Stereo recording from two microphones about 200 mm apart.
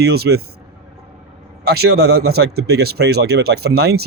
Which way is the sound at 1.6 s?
50° right (ahead or behind).